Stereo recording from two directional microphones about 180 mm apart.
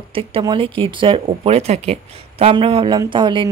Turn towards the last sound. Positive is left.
turn(degrees=-25)  # may be behind; listen again after turning